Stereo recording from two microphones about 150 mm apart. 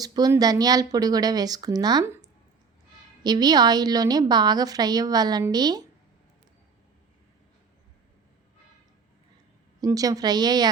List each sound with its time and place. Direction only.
0.0 s a woman's voice: 25° right (ahead or behind)
3.2 s a woman's voice: 25° right (ahead or behind)
9.8 s a woman's voice: 25° right (ahead or behind)